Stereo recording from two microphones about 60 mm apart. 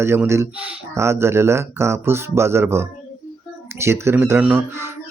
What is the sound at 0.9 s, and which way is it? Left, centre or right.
Speech, right.